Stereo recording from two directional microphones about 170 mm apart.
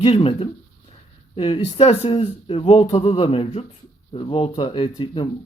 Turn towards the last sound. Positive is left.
turn(degrees=30)  # may be behind; listen again after turning